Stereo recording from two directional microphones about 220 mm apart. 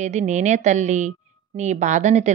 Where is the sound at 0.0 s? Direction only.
30° right (ahead or behind).